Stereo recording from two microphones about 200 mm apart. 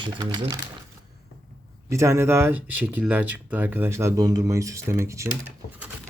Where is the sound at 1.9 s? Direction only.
15° right (ahead or behind).